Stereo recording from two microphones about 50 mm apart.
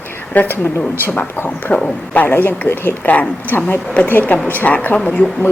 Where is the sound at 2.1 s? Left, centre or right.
Left.